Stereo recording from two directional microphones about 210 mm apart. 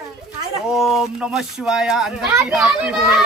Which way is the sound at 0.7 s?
Centre (ahead or behind).